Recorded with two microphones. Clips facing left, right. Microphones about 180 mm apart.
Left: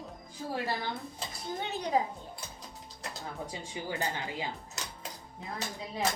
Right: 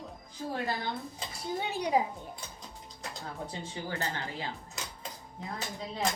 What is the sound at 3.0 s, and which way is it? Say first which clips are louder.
Speech: even; 5° left (ahead or behind).